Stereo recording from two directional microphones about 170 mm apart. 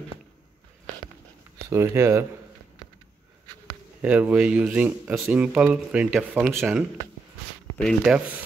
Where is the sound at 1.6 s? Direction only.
15° right (ahead or behind).